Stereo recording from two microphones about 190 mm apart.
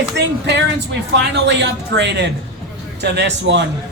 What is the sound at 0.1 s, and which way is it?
A man's voice, 65° right (ahead or behind).